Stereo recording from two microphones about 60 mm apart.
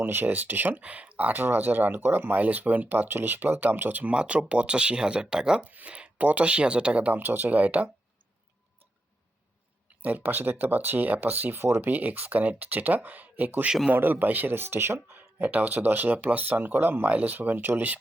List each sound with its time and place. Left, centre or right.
0.0 s speech: right
1.3 s speech: right; by 5.6 s centre
5.6 s speech: right
7.2 s speech: right
10.0 s speech: right
15.4 s speech: right